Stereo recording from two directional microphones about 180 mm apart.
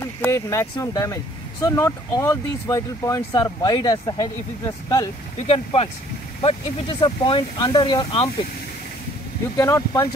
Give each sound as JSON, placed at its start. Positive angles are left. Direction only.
{"t": 0.0, "sound": "speech", "side_deg": 15}
{"t": 5.5, "sound": "speech", "side_deg": 35}
{"t": 9.6, "sound": "speech", "side_deg": 15}